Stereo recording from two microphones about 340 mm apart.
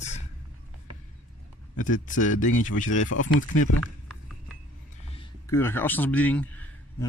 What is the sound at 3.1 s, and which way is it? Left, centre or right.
Speech, left.